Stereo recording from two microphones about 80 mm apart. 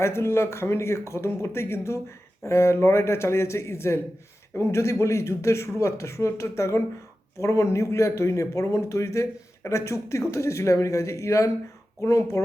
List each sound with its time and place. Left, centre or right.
0.0 s speech: left